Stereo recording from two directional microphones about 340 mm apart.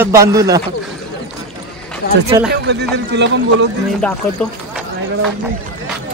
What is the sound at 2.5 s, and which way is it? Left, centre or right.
Speech, right.